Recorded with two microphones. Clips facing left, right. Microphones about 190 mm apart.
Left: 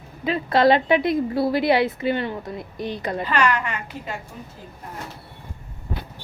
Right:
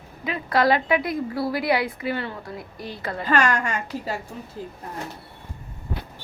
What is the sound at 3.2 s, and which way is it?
Speech, 45° right (ahead or behind).